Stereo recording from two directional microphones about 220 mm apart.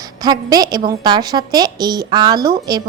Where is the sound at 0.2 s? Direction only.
15° right (ahead or behind).